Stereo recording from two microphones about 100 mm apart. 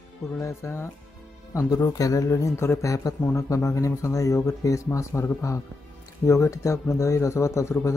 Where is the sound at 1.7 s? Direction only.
35° left (ahead or behind).